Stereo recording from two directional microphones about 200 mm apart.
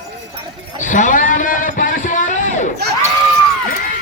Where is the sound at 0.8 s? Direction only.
40° left (ahead or behind).